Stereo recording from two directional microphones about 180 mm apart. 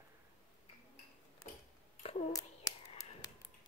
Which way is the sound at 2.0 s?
35° left (ahead or behind).